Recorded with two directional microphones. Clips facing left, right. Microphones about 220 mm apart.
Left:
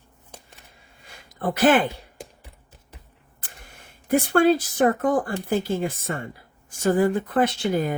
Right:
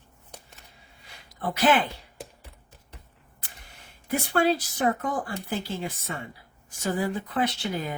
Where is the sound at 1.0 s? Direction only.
50° left (ahead or behind).